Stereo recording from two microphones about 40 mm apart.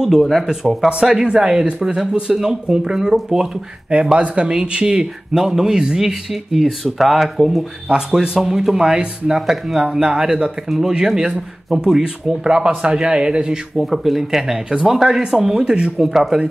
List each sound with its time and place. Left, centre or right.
0.0 s speech: centre
1.2 s speech: right
3.9 s speech: right
5.3 s speech: centre
6.3 s speech: centre
7.9 s speech: centre
8.4 s speech: centre
9.8 s speech: centre
12.4 s speech: right
13.7 s speech: centre; by 15.9 s right
16.0 s speech: centre